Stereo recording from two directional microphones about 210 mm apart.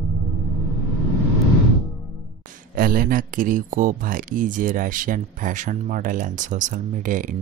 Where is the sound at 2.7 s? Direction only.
40° right (ahead or behind).